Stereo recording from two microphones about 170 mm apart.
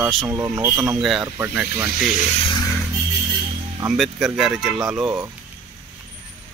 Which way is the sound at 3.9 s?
Centre (ahead or behind).